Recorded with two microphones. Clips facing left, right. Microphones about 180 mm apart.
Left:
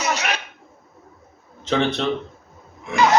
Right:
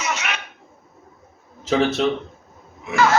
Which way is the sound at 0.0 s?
35° left (ahead or behind).